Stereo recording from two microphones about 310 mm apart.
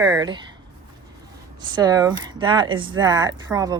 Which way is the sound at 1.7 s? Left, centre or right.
Centre.